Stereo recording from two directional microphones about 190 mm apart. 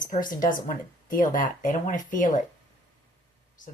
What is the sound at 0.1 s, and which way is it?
Speech, 45° left (ahead or behind).